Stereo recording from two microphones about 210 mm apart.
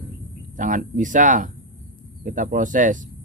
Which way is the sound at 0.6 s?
35° right (ahead or behind).